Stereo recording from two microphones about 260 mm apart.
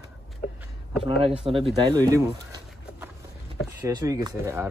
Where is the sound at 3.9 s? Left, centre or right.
Centre.